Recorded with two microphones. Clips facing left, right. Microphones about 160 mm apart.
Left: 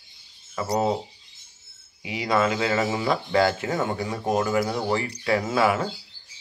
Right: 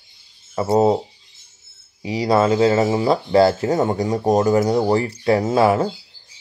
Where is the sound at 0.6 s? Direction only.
35° right (ahead or behind).